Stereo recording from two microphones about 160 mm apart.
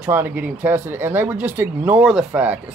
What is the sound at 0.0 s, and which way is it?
Speech, 10° right (ahead or behind).